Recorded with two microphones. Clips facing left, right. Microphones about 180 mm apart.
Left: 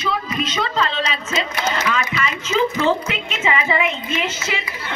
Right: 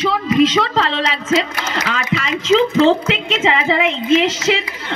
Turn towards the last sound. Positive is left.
turn(degrees=-85)